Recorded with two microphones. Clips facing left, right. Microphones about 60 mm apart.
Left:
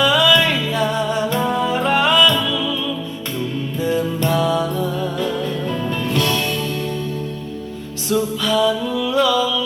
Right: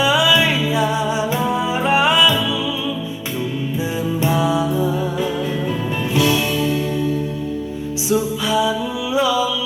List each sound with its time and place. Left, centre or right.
0.0 s music: centre
3.8 s music: centre
8.1 s music: centre